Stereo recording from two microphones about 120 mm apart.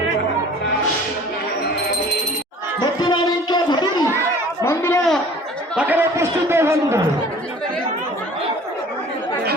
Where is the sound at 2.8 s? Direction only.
35° left (ahead or behind).